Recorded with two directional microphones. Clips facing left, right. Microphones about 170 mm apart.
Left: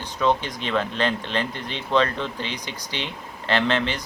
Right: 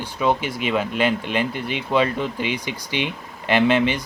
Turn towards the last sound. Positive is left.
turn(degrees=-10)  # may be behind; listen again after turning